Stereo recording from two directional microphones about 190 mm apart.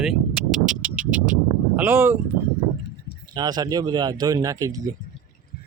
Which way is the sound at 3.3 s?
20° right (ahead or behind).